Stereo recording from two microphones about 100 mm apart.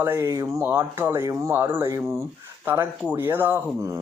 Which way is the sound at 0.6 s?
20° right (ahead or behind).